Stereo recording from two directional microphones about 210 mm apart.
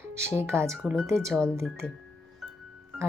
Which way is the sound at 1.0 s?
15° right (ahead or behind).